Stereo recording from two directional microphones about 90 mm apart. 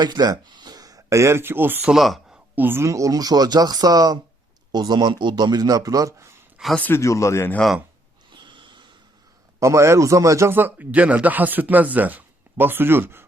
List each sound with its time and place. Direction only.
0.0 s speech: 50° right (ahead or behind); by 1.8 s 25° right (ahead or behind)
1.8 s speech: 5° right (ahead or behind)
2.6 s speech: 25° right (ahead or behind)
6.6 s speech: 5° right (ahead or behind)
6.9 s speech: 35° left (ahead or behind)
8.3 s snort: 60° right (ahead or behind)
9.6 s speech: 30° right (ahead or behind)